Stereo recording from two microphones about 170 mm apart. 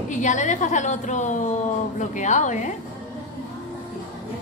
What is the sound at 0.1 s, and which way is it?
A woman's voice, 45° left (ahead or behind).